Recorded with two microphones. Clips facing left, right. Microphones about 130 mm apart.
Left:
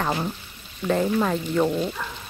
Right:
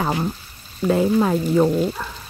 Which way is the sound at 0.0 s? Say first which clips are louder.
Right 3 dB; 10° right (ahead or behind).